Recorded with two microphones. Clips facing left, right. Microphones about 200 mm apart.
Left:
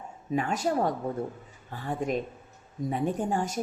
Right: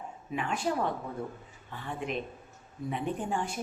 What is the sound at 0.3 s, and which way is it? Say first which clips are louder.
A woman's voice: left 4 dB; 40° left (ahead or behind).